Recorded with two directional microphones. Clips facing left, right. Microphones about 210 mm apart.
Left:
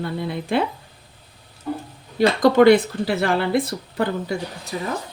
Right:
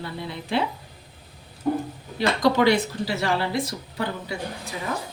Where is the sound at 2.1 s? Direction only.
50° left (ahead or behind).